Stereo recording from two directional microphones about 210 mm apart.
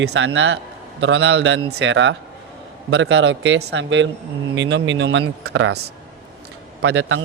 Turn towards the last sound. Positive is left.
turn(degrees=-75)  # may be behind; listen again after turning